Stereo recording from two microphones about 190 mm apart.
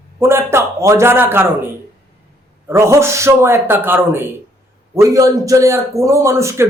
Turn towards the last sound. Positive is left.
turn(degrees=-15)  # may be behind; listen again after turning